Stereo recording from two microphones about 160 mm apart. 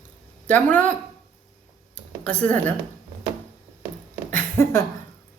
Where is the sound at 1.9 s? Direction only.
10° left (ahead or behind).